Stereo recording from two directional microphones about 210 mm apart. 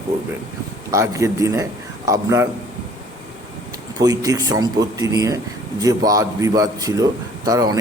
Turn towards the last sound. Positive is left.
turn(degrees=-15)  # may be behind; listen again after turning